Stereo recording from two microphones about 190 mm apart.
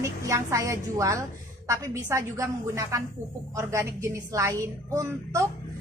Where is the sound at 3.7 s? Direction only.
15° right (ahead or behind).